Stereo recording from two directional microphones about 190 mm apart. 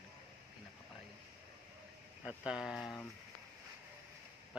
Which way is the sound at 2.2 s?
5° right (ahead or behind).